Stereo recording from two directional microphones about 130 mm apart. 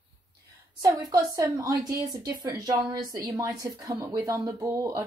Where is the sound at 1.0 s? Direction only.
25° right (ahead or behind).